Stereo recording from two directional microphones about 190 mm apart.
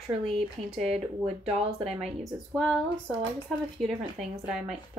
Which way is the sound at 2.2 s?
Centre (ahead or behind).